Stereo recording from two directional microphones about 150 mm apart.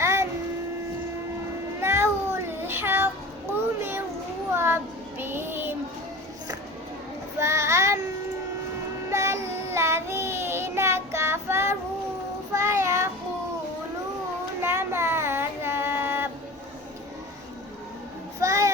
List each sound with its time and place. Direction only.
0.0 s a sound: 20° right (ahead or behind)
1.8 s cat: 15° right (ahead or behind)
4.5 s child singing: 15° right (ahead or behind)
7.3 s child singing: 20° right (ahead or behind)
9.0 s child singing: 20° right (ahead or behind)
14.6 s female singing: 15° right (ahead or behind)
18.3 s child singing: 20° right (ahead or behind)